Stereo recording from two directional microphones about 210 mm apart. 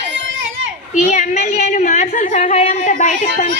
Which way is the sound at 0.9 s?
35° left (ahead or behind).